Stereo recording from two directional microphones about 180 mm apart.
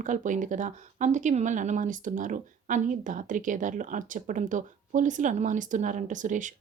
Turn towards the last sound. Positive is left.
turn(degrees=-45)  # may be behind; listen again after turning